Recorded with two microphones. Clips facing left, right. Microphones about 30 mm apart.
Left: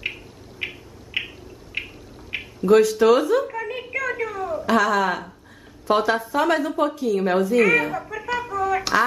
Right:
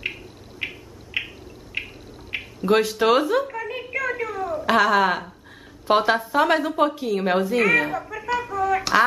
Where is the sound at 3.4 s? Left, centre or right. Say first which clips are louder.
Left 1 dB; centre.